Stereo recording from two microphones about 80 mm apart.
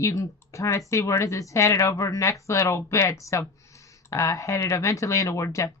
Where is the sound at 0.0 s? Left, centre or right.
Left.